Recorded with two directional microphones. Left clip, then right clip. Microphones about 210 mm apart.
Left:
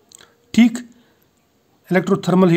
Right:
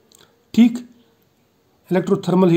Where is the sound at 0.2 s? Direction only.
25° left (ahead or behind).